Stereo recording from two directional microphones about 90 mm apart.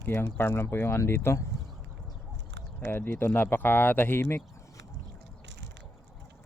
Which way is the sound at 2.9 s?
25° left (ahead or behind).